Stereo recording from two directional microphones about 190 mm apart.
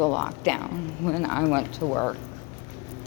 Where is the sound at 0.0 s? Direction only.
5° left (ahead or behind).